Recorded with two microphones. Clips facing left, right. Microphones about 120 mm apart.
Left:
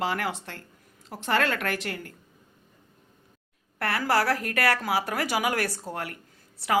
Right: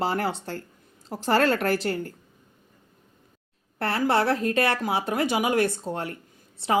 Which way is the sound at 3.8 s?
25° right (ahead or behind).